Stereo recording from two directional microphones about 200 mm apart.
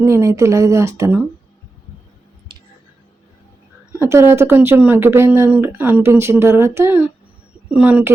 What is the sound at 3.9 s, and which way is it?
Speech, 10° right (ahead or behind).